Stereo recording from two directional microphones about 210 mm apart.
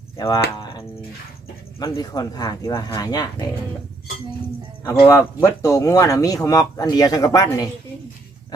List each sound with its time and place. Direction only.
0.2 s speech: 20° left (ahead or behind)
1.8 s speech: 20° left (ahead or behind)
4.8 s speech: 10° left (ahead or behind)